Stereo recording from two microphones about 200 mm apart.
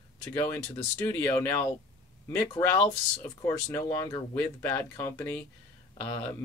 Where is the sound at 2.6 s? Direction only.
25° left (ahead or behind).